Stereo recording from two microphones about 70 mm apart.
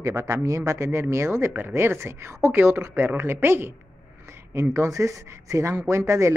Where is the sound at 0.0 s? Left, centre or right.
Right.